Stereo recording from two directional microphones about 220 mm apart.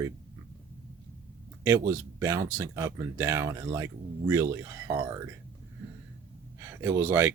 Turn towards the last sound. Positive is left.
turn(degrees=-10)  # may be behind; listen again after turning